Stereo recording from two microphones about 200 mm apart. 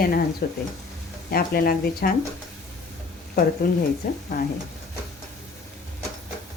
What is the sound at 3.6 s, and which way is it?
Speech, 45° left (ahead or behind).